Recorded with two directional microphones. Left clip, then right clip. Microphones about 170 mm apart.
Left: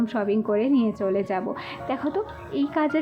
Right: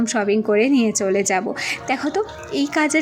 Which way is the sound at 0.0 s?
15° right (ahead or behind).